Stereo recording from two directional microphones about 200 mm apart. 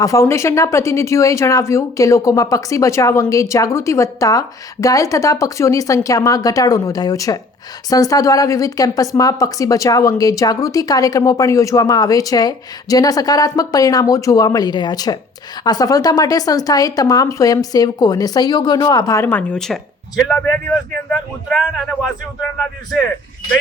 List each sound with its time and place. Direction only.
0.0 s a man's voice: 15° left (ahead or behind)